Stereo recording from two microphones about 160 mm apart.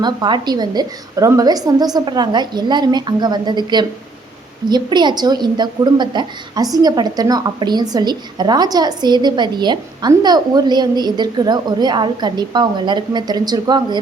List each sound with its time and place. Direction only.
0.0 s a woman's voice: 25° right (ahead or behind)